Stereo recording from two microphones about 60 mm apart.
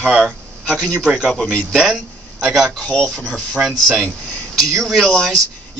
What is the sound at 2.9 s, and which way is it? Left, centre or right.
Speech, centre.